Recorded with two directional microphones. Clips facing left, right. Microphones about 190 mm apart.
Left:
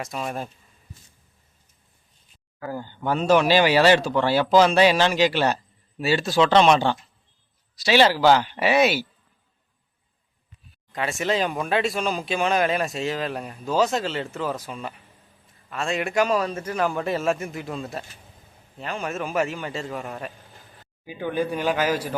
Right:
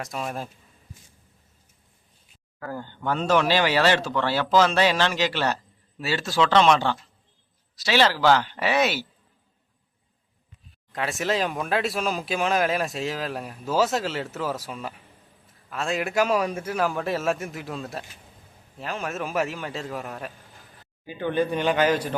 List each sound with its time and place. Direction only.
0.0 s speech: centre (ahead or behind)
2.6 s speech: 5° left (ahead or behind)
10.9 s speech: centre (ahead or behind)